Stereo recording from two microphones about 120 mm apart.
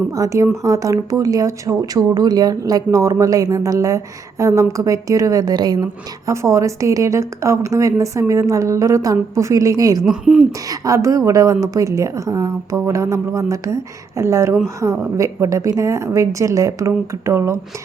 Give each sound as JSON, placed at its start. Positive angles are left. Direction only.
{"t": 0.1, "sound": "a woman's voice", "side_deg": -25}
{"t": 6.2, "sound": "a woman's voice", "side_deg": -25}
{"t": 10.0, "sound": "speech", "side_deg": -5}
{"t": 10.7, "sound": "a woman's voice", "side_deg": -25}